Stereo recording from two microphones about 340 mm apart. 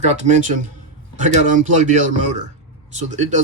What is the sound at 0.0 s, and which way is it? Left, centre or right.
Speech, centre.